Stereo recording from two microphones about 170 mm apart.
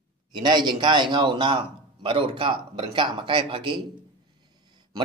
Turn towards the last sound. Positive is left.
turn(degrees=-30)  # may be behind; listen again after turning